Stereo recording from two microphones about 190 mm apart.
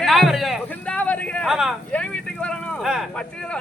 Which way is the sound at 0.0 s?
Centre (ahead or behind).